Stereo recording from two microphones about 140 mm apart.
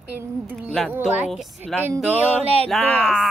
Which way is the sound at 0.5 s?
Centre (ahead or behind).